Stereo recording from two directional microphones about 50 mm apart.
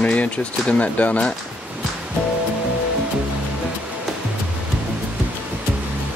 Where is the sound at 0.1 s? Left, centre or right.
Left.